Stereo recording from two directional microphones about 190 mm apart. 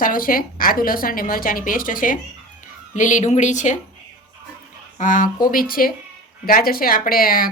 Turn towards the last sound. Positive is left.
turn(degrees=50)  # may be behind; listen again after turning